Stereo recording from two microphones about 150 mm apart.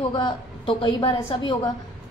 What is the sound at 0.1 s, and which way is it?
A woman's voice, 35° left (ahead or behind).